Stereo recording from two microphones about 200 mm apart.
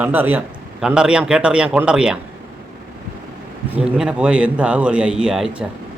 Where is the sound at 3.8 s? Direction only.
5° right (ahead or behind).